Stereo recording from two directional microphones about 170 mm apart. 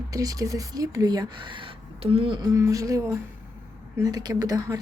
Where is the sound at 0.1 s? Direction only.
20° right (ahead or behind).